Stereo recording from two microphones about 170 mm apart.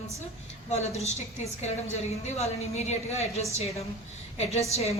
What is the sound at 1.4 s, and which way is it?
A woman's voice, 40° left (ahead or behind).